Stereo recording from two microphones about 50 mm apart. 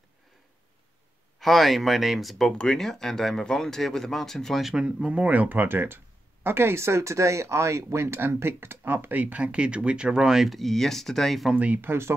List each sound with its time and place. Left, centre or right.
1.4 s speech: centre
2.5 s speech: centre
4.7 s speech: centre
5.6 s speech: right
8.1 s speech: right
9.2 s speech: right
10.4 s speech: centre
11.5 s speech: right